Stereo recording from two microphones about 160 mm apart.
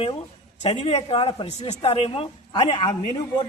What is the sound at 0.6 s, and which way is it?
A woman's voice, 35° left (ahead or behind).